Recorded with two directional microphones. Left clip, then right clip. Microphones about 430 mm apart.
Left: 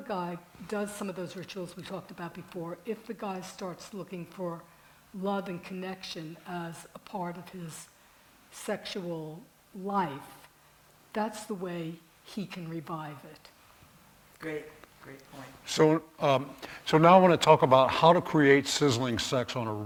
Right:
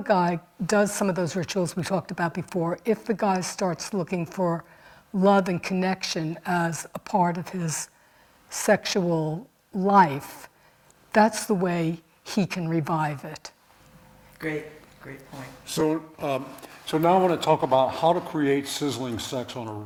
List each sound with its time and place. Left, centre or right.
0.1 s speech: right
15.6 s speech: left